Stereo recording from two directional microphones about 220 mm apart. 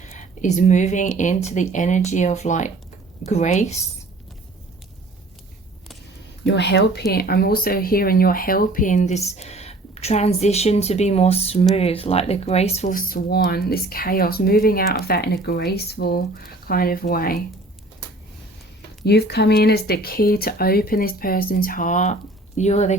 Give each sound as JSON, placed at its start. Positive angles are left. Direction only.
{"t": 0.0, "sound": "speech", "side_deg": 35}
{"t": 6.4, "sound": "speech", "side_deg": 50}
{"t": 19.0, "sound": "speech", "side_deg": 45}